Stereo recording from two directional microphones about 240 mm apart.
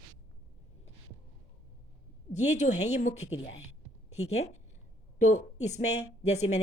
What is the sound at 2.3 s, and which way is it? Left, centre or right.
Speech, left.